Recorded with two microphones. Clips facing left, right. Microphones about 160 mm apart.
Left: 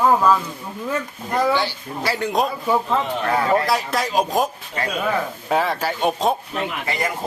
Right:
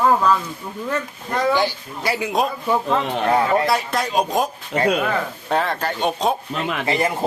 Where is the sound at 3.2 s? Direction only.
20° right (ahead or behind).